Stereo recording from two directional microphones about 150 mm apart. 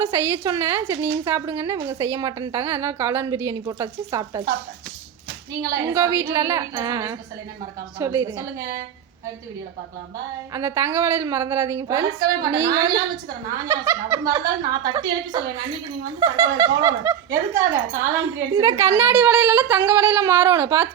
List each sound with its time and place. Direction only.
0.0 s a woman's voice: 20° right (ahead or behind)
5.6 s a woman's voice: 20° right (ahead or behind)
10.5 s a woman's voice: 20° right (ahead or behind)